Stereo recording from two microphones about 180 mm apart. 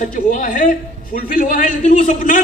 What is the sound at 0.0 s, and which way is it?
A man's voice, 50° left (ahead or behind).